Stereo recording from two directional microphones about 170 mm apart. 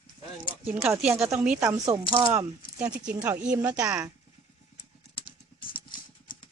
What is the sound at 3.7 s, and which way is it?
Speech, 20° right (ahead or behind).